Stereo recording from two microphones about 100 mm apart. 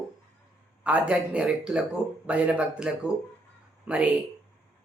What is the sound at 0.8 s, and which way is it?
A man's voice, 15° right (ahead or behind).